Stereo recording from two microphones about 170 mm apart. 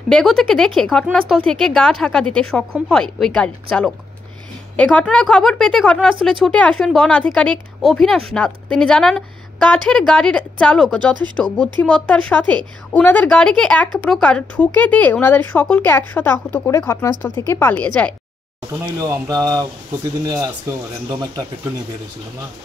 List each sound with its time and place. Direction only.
0.1 s speech: 5° left (ahead or behind)
18.7 s speech: 15° right (ahead or behind)